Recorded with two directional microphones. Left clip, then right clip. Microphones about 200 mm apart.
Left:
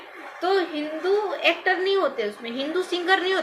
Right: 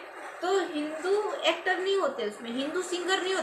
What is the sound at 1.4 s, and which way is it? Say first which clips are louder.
A woman's voice: left 5 dB; 20° right (ahead or behind).